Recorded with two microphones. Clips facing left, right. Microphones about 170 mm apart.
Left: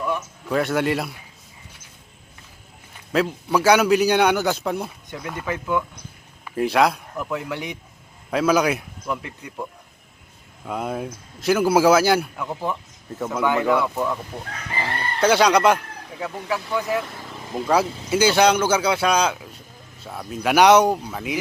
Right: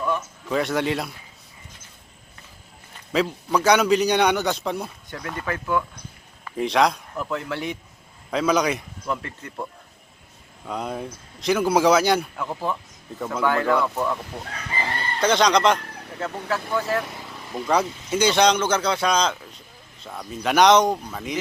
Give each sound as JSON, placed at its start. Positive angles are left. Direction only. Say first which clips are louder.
{"t": 0.1, "sound": "a man's voice", "louder": "left 1 dB", "side_deg": 5}
{"t": 3.1, "sound": "a man's voice", "louder": "left 1 dB", "side_deg": 5}
{"t": 6.4, "sound": "speech", "louder": "left 1 dB", "side_deg": 5}
{"t": 10.7, "sound": "a man's voice", "louder": "left 2 dB", "side_deg": 5}
{"t": 13.4, "sound": "speech", "louder": "left 1 dB", "side_deg": 15}
{"t": 15.2, "sound": "speech", "louder": "left 2 dB", "side_deg": 10}